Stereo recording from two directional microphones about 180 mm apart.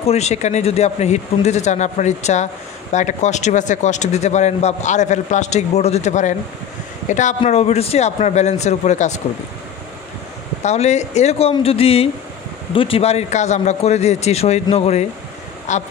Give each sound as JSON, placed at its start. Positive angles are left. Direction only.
{"t": 0.0, "sound": "speech", "side_deg": 35}
{"t": 10.6, "sound": "speech", "side_deg": 40}